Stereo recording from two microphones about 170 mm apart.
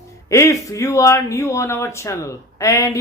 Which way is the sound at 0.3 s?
20° left (ahead or behind).